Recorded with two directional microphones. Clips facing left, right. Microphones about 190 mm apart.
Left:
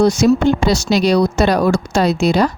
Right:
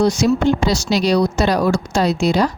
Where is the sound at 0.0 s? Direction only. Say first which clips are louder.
Left 3 dB; 50° left (ahead or behind).